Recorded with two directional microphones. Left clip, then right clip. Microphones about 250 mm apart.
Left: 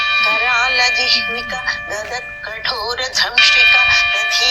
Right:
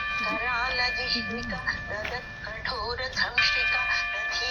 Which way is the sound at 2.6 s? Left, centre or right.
Left.